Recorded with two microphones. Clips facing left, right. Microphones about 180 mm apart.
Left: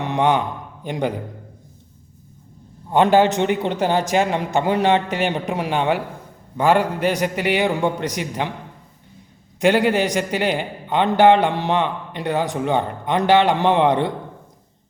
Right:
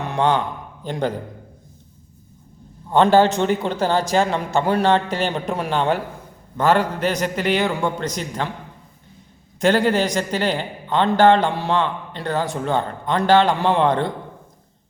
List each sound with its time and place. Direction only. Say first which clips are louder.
0.0 s a man's voice: left 1 dB; 15° left (ahead or behind)
2.9 s a man's voice: even; 15° left (ahead or behind)
9.6 s a man's voice: left 1 dB; 15° left (ahead or behind)